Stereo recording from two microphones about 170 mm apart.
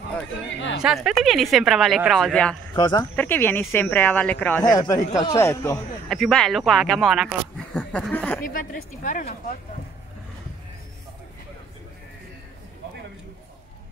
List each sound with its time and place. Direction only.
0.8 s speech: centre (ahead or behind)
2.7 s speech: 25° left (ahead or behind)
3.2 s speech: 10° left (ahead or behind)
4.6 s speech: 20° left (ahead or behind)
6.0 s speech: centre (ahead or behind)
8.5 s speech: 50° left (ahead or behind)